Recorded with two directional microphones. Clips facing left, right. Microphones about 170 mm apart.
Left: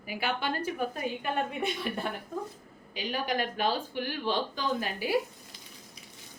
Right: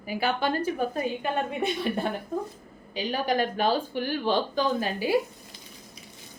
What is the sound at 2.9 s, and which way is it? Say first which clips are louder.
A woman's voice: right 5 dB; 35° right (ahead or behind).